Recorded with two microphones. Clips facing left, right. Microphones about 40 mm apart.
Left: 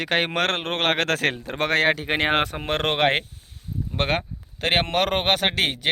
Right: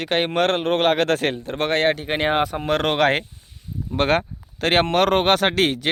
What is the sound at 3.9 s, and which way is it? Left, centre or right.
Speech, centre.